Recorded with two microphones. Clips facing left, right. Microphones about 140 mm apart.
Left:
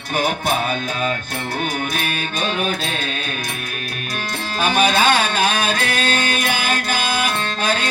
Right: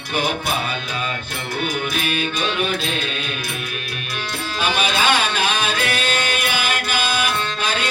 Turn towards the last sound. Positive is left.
turn(degrees=45)  # may be behind; listen again after turning